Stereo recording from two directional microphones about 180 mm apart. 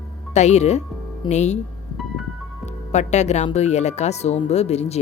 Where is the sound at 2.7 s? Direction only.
40° left (ahead or behind).